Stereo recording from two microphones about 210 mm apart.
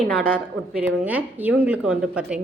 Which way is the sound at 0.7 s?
5° right (ahead or behind).